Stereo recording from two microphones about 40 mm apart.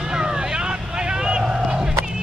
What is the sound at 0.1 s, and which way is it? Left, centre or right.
Vehicle, centre.